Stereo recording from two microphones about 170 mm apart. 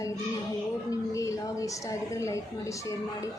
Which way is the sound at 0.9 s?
20° left (ahead or behind).